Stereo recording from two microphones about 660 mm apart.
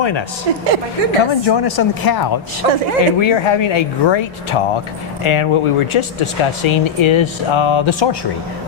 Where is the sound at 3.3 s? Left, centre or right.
Left.